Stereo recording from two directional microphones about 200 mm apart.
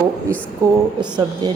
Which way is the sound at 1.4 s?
20° right (ahead or behind).